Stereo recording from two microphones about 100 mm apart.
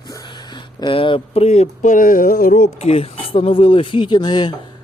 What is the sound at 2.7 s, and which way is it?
Speech, 85° left.